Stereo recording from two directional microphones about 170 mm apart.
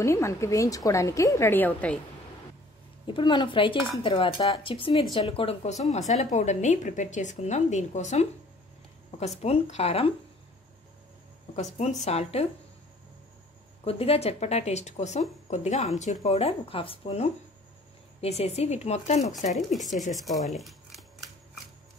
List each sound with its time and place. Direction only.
0.0 s a woman's voice: 15° left (ahead or behind)
3.1 s a woman's voice: 30° left (ahead or behind)
9.4 s speech: 40° left (ahead or behind)
11.8 s speech: 40° left (ahead or behind)
13.8 s speech: 35° left (ahead or behind)
19.7 s speech: centre (ahead or behind)
20.1 s scissors: centre (ahead or behind)